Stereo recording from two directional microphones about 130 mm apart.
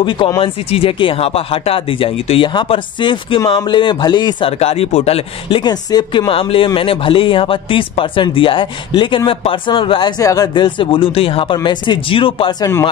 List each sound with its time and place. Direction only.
0.4 s speech: 45° left (ahead or behind)
4.5 s speech: 50° left (ahead or behind)
5.6 s speech: 30° left (ahead or behind)